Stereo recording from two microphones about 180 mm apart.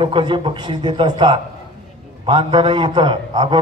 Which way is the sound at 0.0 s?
25° right (ahead or behind).